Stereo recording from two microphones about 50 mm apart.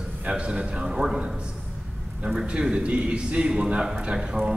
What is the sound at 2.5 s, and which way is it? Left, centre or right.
A man's voice, centre.